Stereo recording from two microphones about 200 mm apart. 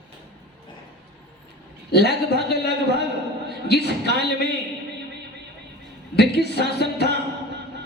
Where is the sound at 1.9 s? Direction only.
55° left (ahead or behind).